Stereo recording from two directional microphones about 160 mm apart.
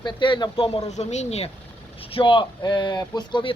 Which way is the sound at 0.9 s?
45° left (ahead or behind).